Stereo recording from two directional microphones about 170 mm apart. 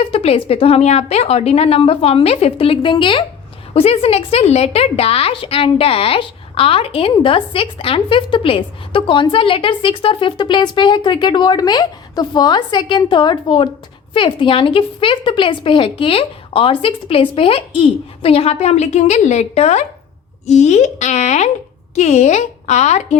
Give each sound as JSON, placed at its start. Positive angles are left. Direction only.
{"t": 0.0, "sound": "a woman's voice", "side_deg": 35}